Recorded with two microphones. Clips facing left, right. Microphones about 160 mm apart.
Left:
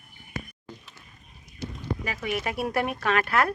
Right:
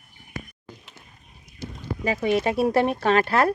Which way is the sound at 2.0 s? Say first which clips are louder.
Right 10 dB; 30° right (ahead or behind).